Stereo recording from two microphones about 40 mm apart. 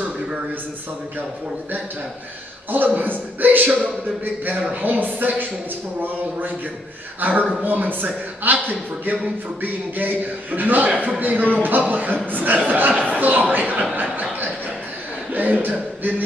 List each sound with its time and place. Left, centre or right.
2.7 s a man's voice: right
7.2 s a man's voice: right
15.3 s speech: right